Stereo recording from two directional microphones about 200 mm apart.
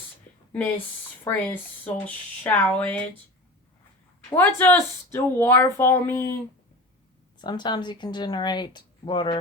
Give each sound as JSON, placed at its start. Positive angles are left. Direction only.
{"t": 1.2, "sound": "speech", "side_deg": 10}
{"t": 4.4, "sound": "speech", "side_deg": 10}
{"t": 7.3, "sound": "speech", "side_deg": 20}